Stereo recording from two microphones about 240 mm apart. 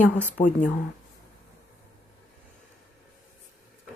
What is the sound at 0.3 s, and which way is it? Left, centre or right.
Speech, left.